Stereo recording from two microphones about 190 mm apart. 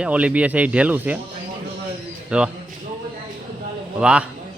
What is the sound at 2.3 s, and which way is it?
Speech, 5° right (ahead or behind).